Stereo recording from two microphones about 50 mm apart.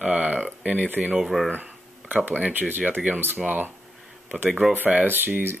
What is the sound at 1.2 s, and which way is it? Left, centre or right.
Speech, centre.